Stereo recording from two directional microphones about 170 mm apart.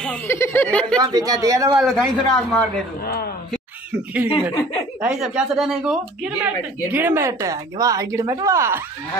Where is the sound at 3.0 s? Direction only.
65° left (ahead or behind).